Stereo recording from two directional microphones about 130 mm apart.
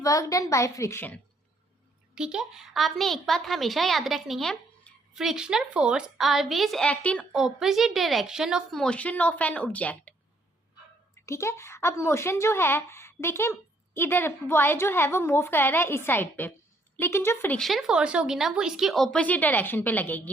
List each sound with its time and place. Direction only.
0.0 s speech: 25° left (ahead or behind)
2.1 s a woman's voice: 5° right (ahead or behind); by 7.3 s 10° left (ahead or behind)
7.3 s a woman's voice: centre (ahead or behind); by 17.6 s 15° left (ahead or behind)
17.6 s a woman's voice: centre (ahead or behind)